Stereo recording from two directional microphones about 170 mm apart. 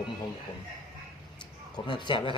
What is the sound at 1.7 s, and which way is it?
Speech, 25° left (ahead or behind).